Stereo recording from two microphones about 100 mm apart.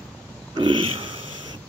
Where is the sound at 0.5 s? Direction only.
55° right (ahead or behind).